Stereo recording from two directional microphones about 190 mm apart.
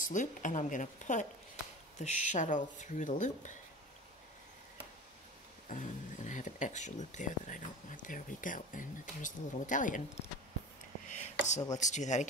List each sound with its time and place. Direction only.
0.0 s speech: 40° left (ahead or behind)
5.7 s speech: 40° left (ahead or behind)
11.1 s a sound: 40° left (ahead or behind)
11.8 s speech: 40° left (ahead or behind)